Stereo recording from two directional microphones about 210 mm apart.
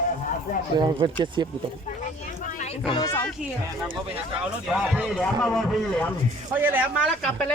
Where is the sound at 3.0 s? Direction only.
10° left (ahead or behind).